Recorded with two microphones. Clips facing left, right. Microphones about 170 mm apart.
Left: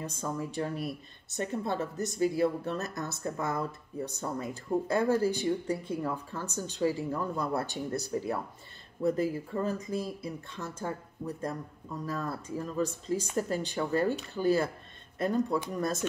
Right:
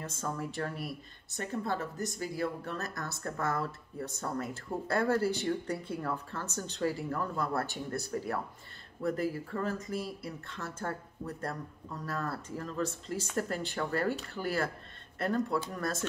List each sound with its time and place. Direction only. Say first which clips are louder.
0.0 s speech: left 2 dB; 15° left (ahead or behind)